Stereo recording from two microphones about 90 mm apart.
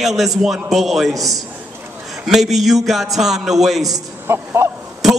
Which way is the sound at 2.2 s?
5° right (ahead or behind).